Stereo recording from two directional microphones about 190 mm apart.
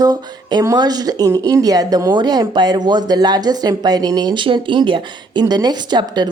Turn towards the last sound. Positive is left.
turn(degrees=-20)  # may be behind; listen again after turning